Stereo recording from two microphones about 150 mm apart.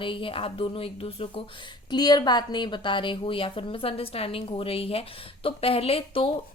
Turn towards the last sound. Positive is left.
turn(degrees=40)  # may be behind; listen again after turning